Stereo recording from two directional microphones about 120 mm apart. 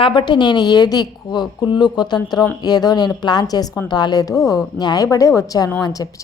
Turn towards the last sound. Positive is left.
turn(degrees=30)  # may be behind; listen again after turning